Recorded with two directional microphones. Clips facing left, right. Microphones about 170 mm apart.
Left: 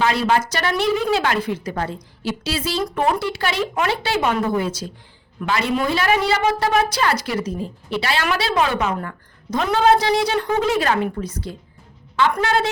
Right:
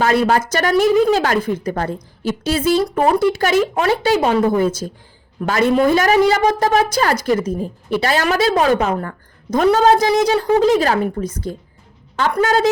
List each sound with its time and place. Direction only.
0.0 s a woman's voice: 45° right (ahead or behind)